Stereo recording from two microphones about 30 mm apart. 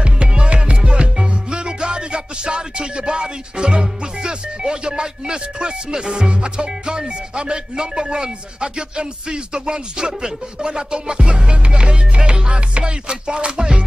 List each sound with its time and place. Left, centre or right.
0.0 s music: right
1.1 s music: right